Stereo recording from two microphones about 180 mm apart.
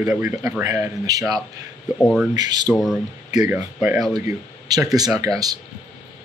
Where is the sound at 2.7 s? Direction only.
Centre (ahead or behind).